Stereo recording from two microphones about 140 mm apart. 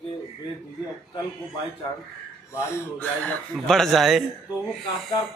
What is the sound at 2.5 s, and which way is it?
Speech, 20° left (ahead or behind).